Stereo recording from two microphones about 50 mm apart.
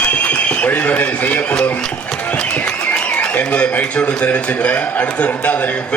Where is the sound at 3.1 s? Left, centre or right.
Left.